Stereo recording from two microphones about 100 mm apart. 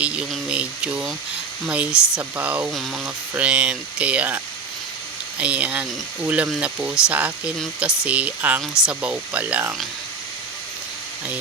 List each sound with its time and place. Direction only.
0.0 s speech: 10° right (ahead or behind)
0.4 s a sound: 10° right (ahead or behind)
1.6 s speech: 10° right (ahead or behind)
5.4 s speech: 15° right (ahead or behind)